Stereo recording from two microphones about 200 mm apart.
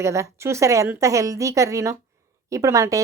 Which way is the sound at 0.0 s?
15° right (ahead or behind).